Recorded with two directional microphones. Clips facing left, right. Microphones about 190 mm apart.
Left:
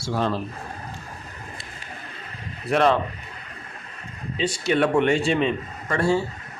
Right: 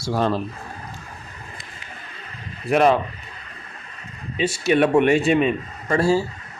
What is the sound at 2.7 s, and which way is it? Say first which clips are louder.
Speech: right 3 dB; 15° right (ahead or behind).